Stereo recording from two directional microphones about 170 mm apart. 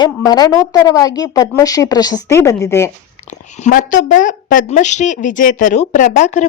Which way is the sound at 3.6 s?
50° left (ahead or behind).